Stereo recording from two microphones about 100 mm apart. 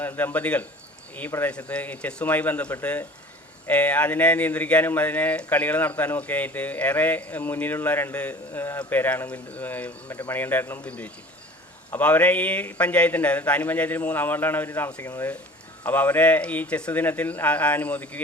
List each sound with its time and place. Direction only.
0.0 s speech: 20° left (ahead or behind)